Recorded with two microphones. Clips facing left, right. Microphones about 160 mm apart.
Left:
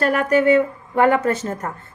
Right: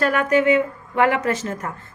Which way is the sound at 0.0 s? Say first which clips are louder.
Left 1 dB; 40° left (ahead or behind).